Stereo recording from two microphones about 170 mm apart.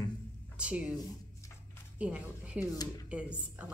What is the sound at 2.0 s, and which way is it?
Speech, 10° right (ahead or behind).